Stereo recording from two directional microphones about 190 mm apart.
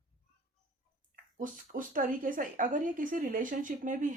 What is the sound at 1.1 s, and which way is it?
A woman's voice, 45° right (ahead or behind).